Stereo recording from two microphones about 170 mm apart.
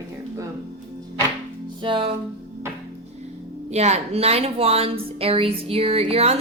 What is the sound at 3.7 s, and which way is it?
A woman's voice, 40° right (ahead or behind).